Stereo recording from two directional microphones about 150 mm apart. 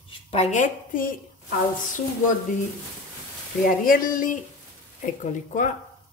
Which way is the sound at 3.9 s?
65° left (ahead or behind).